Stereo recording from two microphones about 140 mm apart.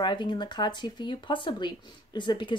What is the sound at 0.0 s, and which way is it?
Speech, 35° left (ahead or behind).